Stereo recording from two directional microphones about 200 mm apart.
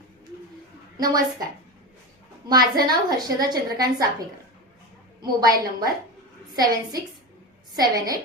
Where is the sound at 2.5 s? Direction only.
20° right (ahead or behind).